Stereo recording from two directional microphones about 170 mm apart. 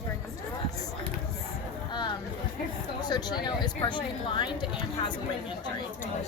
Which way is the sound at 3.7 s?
25° left (ahead or behind).